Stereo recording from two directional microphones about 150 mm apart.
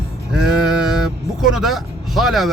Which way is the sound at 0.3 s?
5° right (ahead or behind).